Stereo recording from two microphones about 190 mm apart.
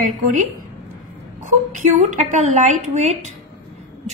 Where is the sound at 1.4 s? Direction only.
40° right (ahead or behind).